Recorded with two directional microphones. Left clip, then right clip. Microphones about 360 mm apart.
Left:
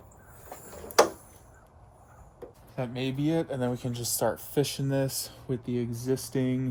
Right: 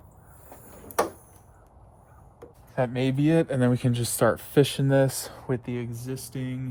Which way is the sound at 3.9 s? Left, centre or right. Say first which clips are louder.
Right 5 dB; centre.